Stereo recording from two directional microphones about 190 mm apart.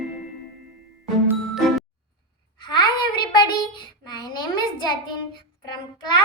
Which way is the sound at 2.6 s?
25° left (ahead or behind).